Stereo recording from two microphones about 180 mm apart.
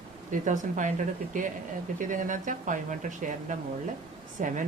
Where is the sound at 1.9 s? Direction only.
45° right (ahead or behind).